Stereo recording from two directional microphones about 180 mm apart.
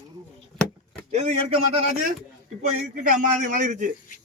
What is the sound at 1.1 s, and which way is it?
Speech, 35° right (ahead or behind).